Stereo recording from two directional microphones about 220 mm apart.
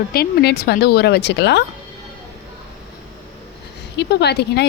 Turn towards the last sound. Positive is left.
turn(degrees=50)  # may be behind; listen again after turning